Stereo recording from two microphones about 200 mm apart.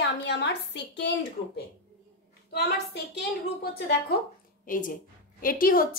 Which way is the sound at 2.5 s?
55° left (ahead or behind).